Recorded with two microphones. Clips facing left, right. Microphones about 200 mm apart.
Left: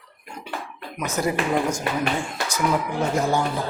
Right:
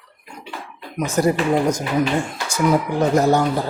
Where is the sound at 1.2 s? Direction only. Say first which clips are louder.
Right 5 dB; 40° right (ahead or behind).